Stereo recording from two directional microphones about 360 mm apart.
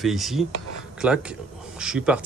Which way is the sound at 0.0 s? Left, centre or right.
Centre.